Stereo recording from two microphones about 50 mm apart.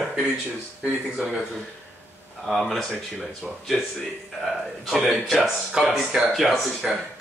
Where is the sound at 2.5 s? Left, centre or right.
Centre.